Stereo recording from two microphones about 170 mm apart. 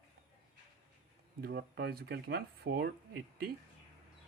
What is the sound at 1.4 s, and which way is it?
Speech, 70° right (ahead or behind).